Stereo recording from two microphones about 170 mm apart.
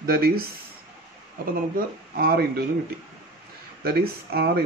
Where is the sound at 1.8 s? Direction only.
60° right (ahead or behind).